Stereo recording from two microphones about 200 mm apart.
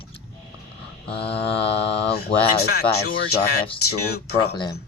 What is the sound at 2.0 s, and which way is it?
Speech, 55° left (ahead or behind).